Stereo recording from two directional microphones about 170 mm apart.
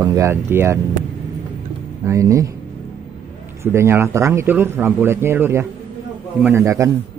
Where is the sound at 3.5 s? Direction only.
15° right (ahead or behind).